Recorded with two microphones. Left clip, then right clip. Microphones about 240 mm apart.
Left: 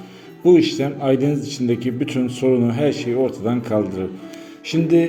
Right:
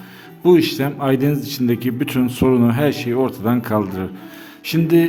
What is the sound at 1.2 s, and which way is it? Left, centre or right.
A man's voice, right.